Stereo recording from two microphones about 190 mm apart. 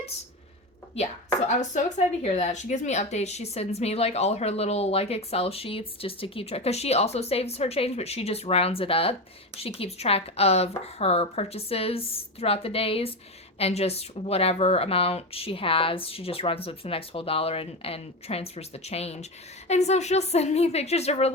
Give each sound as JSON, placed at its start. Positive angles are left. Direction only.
{"t": 0.9, "sound": "speech", "side_deg": 35}